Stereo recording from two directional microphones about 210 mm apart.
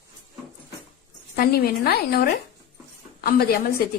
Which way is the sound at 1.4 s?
45° left (ahead or behind).